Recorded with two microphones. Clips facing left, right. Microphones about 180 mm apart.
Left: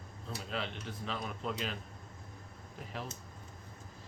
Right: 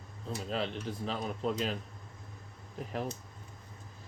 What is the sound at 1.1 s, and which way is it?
Speech, 35° right (ahead or behind).